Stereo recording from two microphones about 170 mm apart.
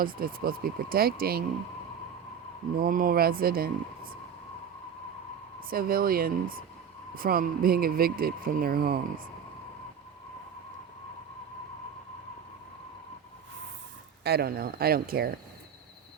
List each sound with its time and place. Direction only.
0.0 s speech: 60° right (ahead or behind)
2.7 s speech: 55° right (ahead or behind)
5.5 s speech: 60° right (ahead or behind)
14.3 s speech: 70° right (ahead or behind)